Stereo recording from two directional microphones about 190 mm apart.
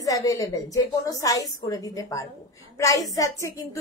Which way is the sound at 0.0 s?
20° left (ahead or behind).